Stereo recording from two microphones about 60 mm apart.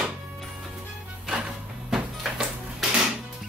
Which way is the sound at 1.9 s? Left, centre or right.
Centre.